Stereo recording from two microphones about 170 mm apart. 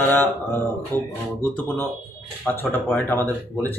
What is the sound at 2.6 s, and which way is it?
Speech, 10° left (ahead or behind).